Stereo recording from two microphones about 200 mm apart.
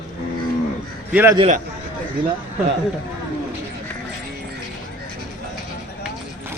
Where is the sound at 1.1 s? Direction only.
10° right (ahead or behind).